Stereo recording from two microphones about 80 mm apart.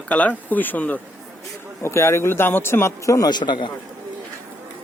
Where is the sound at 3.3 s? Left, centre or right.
Left.